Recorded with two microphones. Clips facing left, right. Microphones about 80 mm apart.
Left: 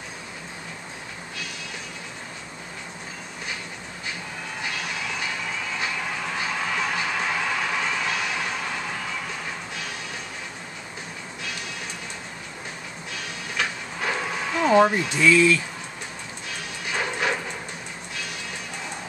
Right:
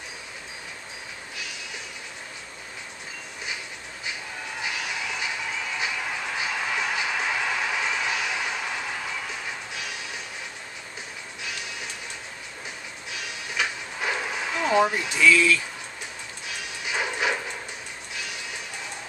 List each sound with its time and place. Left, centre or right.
4.6 s music: centre
13.1 s music: centre
14.7 s speech: centre
15.1 s speech: left
16.4 s music: centre
18.1 s vehicle: centre